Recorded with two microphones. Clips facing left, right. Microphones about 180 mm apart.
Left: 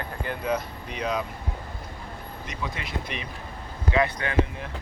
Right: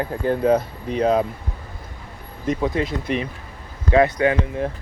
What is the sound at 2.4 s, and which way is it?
Speech, 50° right (ahead or behind).